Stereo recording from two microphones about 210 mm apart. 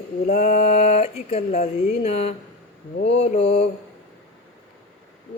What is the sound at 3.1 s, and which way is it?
Mantra, 30° left (ahead or behind).